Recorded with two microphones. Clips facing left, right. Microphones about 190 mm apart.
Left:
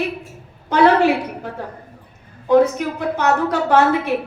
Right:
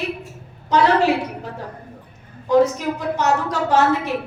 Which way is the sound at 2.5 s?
60° left (ahead or behind).